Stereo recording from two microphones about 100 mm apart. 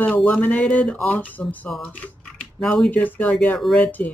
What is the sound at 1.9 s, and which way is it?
Speech, 15° left (ahead or behind).